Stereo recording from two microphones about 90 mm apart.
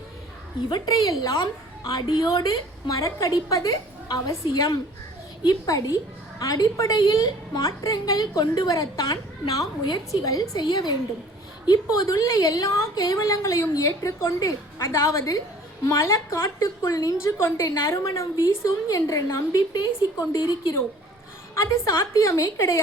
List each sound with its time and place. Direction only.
0.7 s a woman's voice: 45° left (ahead or behind)
2.3 s a woman's voice: 45° left (ahead or behind)